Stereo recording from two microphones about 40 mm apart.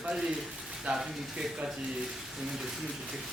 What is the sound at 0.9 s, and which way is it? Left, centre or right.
Speech, centre.